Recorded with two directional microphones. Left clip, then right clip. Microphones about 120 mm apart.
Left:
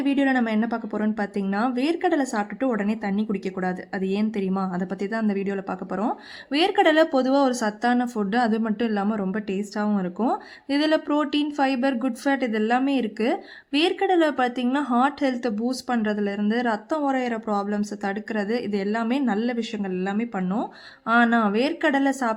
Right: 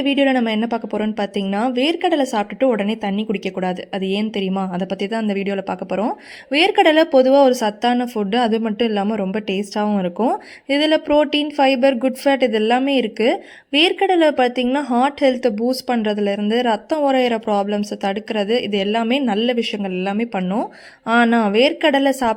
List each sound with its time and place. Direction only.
0.0 s speech: 20° right (ahead or behind)